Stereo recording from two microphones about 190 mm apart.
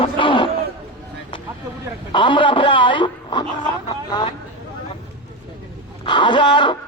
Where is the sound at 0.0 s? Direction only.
25° left (ahead or behind).